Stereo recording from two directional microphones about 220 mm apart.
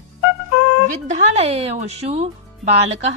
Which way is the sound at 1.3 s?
30° right (ahead or behind).